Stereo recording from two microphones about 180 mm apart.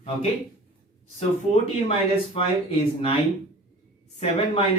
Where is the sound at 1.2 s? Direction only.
35° left (ahead or behind).